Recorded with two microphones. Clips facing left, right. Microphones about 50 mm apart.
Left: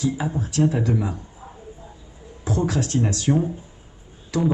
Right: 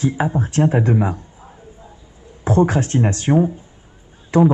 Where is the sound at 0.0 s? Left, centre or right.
Right.